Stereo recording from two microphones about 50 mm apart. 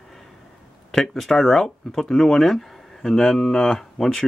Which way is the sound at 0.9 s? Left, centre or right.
Centre.